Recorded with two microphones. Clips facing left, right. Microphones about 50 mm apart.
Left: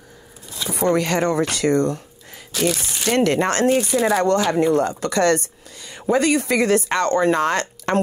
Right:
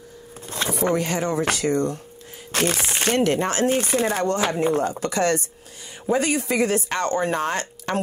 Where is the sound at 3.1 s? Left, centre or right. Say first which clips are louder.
Left 4 dB; left.